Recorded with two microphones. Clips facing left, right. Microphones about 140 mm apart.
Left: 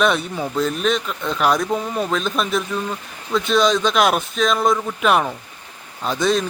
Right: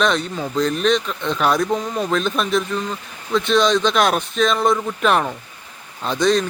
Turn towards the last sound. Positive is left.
turn(degrees=5)  # may be behind; listen again after turning